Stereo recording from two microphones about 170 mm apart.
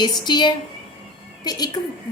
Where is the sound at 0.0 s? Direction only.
25° left (ahead or behind).